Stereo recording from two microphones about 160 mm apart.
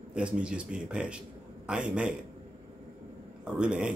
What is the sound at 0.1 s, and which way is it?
A man's voice, 5° right (ahead or behind).